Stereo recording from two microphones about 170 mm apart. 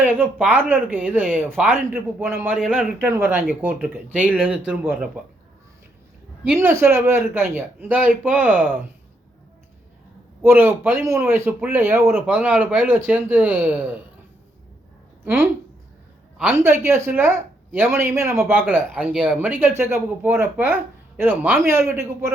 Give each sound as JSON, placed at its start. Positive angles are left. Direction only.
{"t": 0.0, "sound": "speech", "side_deg": -10}
{"t": 6.4, "sound": "speech", "side_deg": -10}
{"t": 10.4, "sound": "speech", "side_deg": -15}
{"t": 15.2, "sound": "speech", "side_deg": -15}